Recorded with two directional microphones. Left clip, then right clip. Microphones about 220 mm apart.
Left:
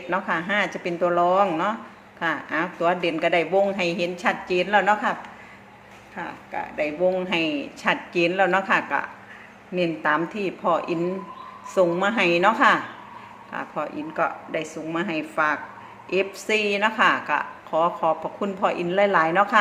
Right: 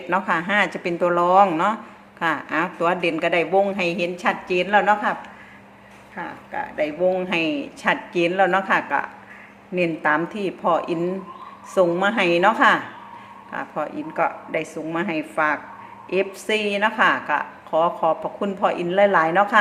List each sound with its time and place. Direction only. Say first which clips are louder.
0.1 s a woman's voice: right 3 dB; 15° right (ahead or behind)
6.1 s a woman's voice: right 2 dB; 5° right (ahead or behind)